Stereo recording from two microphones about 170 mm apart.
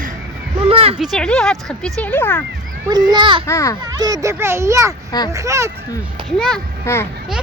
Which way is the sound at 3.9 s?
20° right (ahead or behind).